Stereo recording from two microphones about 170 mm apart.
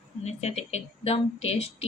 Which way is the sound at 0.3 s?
40° left (ahead or behind).